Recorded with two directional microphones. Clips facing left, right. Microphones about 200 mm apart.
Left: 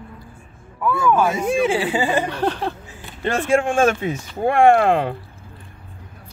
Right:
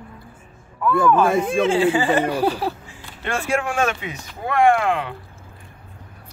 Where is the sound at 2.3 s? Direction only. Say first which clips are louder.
Right 2 dB; 10° right (ahead or behind).